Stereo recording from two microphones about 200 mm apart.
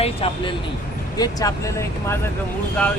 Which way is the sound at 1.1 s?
20° left (ahead or behind).